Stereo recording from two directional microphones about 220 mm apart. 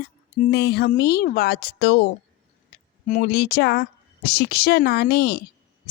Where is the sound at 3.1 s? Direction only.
40° left (ahead or behind).